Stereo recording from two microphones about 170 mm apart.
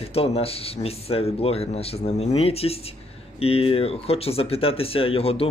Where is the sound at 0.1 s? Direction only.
35° left (ahead or behind).